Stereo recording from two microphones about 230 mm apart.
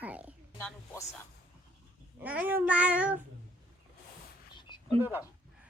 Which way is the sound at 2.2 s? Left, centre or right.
Centre.